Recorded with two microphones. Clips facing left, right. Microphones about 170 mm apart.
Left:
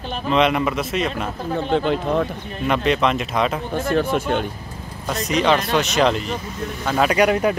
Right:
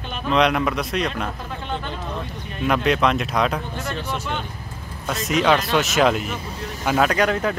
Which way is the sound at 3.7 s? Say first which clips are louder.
Left 8 dB; 50° left (ahead or behind).